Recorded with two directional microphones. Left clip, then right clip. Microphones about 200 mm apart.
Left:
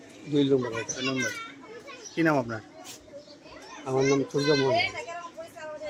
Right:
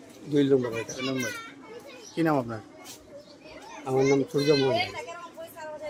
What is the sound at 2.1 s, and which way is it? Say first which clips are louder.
Speech: left 1 dB; centre (ahead or behind).